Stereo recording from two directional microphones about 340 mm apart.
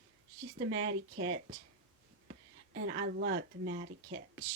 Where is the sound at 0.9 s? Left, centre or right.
Right.